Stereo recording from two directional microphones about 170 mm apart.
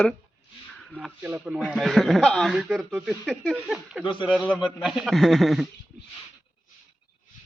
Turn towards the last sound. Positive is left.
turn(degrees=0)  # may be behind; listen again after turning